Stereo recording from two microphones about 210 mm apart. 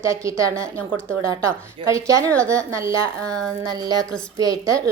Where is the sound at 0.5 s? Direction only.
5° left (ahead or behind).